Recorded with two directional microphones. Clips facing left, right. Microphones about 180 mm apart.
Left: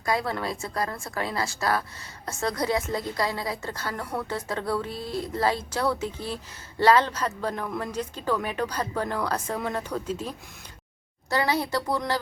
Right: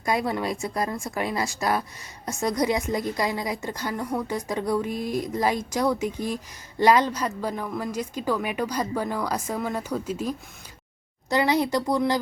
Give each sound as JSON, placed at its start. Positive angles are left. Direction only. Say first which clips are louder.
{"t": 0.0, "sound": "a woman's voice", "louder": "right 2 dB", "side_deg": -20}